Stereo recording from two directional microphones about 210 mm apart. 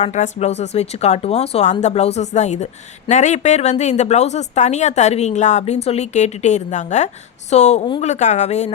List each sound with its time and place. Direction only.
0.0 s speech: 35° left (ahead or behind)